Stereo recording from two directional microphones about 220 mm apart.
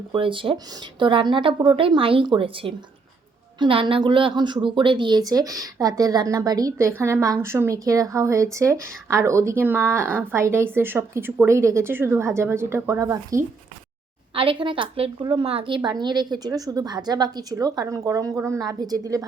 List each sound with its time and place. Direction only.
0.1 s a woman's voice: 25° right (ahead or behind)